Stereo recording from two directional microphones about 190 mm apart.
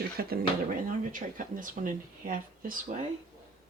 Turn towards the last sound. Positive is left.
turn(degrees=-45)  # may be behind; listen again after turning